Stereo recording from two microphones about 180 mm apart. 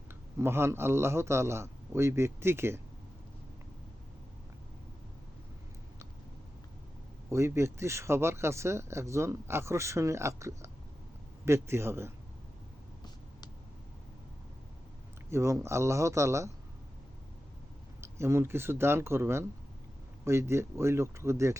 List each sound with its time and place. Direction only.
0.1 s speech: 15° right (ahead or behind)
7.3 s speech: 15° right (ahead or behind)
15.3 s speech: 15° right (ahead or behind)
18.0 s speech: 15° right (ahead or behind)